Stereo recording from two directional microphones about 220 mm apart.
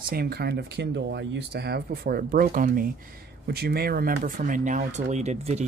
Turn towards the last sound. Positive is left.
turn(degrees=-30)  # may be behind; listen again after turning